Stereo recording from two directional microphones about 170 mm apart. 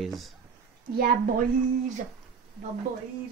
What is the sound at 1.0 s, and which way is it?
Speech, 60° right (ahead or behind).